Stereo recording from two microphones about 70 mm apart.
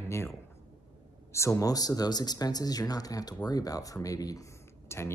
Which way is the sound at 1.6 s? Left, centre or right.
Left.